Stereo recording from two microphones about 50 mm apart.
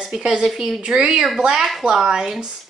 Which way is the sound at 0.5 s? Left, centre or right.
Centre.